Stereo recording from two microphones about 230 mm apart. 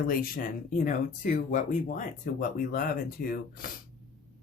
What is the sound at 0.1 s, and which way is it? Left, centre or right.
Speech, left.